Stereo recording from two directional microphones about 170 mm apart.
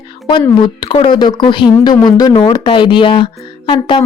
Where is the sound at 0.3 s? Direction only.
25° left (ahead or behind).